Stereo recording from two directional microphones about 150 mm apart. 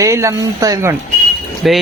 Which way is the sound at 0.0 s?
20° right (ahead or behind).